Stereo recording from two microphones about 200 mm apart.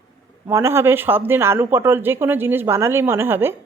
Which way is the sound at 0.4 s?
15° right (ahead or behind).